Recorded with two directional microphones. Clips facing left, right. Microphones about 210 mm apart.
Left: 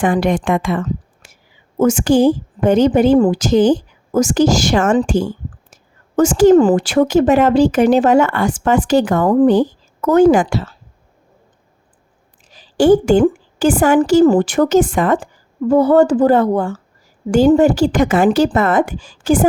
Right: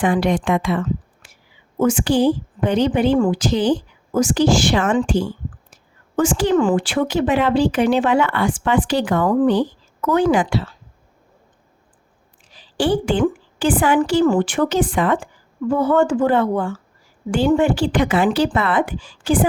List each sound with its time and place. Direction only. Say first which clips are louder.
0.0 s a woman's voice: left 2 dB; 50° left (ahead or behind)
12.5 s a woman's voice: left 8 dB; 45° left (ahead or behind)